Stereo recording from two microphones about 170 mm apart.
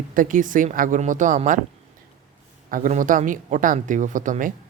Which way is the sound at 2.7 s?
50° right (ahead or behind).